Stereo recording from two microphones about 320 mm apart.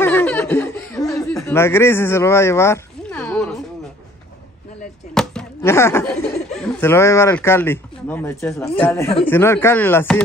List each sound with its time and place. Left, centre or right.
0.0 s laughter: centre
5.1 s chop: centre
6.8 s speech: centre